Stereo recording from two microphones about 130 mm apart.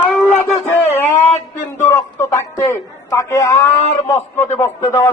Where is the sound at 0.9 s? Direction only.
20° left (ahead or behind).